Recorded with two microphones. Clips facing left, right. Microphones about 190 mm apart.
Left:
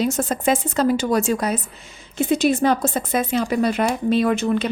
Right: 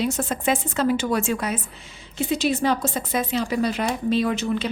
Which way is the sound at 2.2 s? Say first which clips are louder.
Left 4 dB; 50° left (ahead or behind).